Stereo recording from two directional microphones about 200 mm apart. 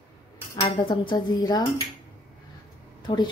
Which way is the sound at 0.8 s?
25° left (ahead or behind).